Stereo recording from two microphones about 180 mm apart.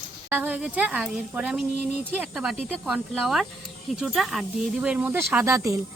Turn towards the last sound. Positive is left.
turn(degrees=-15)  # may be behind; listen again after turning